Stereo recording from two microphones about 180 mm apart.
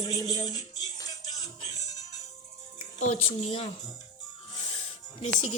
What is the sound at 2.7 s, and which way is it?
Speech, 35° left (ahead or behind).